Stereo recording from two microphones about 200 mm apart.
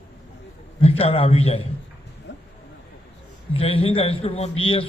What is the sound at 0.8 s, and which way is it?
Speech, 30° left (ahead or behind).